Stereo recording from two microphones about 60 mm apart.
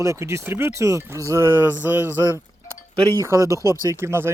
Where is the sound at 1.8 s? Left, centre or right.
Right.